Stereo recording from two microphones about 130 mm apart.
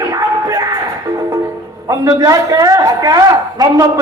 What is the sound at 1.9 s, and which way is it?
A woman's voice, 30° right (ahead or behind).